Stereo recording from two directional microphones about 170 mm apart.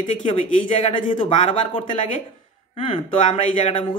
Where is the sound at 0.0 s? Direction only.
45° left (ahead or behind).